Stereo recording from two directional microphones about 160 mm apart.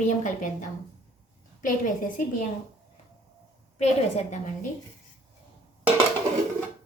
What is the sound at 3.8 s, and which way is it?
Speech, 45° left (ahead or behind).